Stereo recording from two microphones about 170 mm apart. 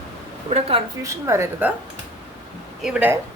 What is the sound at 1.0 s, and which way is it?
Speech, 15° right (ahead or behind).